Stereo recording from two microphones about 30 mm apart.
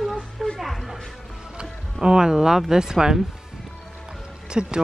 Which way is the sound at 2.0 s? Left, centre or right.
Right.